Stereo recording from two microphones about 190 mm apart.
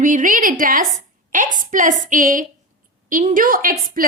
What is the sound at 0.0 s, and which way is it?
A woman's voice, 45° right (ahead or behind).